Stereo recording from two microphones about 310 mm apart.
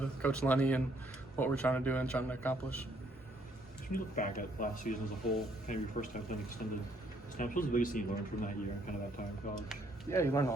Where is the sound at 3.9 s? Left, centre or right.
Left.